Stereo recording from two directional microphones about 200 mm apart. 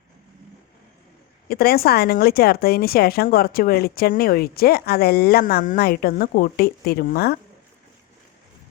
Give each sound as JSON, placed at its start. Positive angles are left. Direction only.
{"t": 1.5, "sound": "speech", "side_deg": 50}